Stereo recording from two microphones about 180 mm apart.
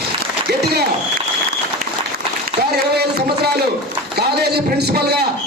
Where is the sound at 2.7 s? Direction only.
65° right (ahead or behind).